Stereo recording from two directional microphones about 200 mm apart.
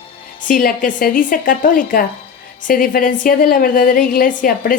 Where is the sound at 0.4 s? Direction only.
45° left (ahead or behind).